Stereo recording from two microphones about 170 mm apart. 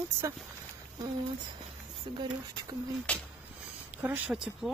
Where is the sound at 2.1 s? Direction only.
30° right (ahead or behind).